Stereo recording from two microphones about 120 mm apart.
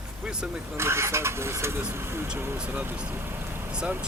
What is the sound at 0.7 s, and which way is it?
Speech, 20° right (ahead or behind).